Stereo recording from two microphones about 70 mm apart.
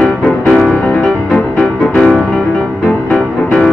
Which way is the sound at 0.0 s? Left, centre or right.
Centre.